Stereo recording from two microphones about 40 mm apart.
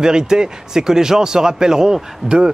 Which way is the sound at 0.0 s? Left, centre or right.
Centre.